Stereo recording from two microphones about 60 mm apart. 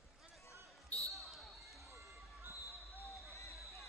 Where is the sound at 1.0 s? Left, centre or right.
Right.